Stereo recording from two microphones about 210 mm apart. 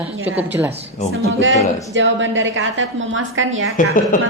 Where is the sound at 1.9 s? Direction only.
60° right (ahead or behind).